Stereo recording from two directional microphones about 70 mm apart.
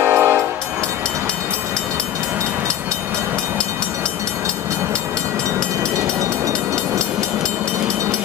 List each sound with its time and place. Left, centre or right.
0.0 s train: right